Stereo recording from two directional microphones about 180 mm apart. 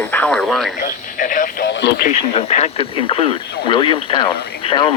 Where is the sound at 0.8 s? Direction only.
50° left (ahead or behind).